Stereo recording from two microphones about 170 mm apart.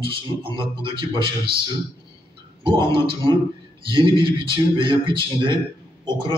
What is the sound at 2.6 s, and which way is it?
A man's voice, 30° right (ahead or behind).